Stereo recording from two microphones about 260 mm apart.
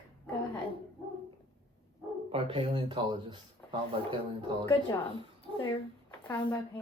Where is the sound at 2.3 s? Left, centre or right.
Centre.